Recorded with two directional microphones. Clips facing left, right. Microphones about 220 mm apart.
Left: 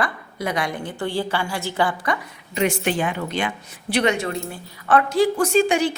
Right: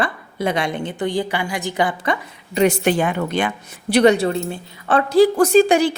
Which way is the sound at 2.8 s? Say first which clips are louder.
Right 5 dB; 50° right (ahead or behind).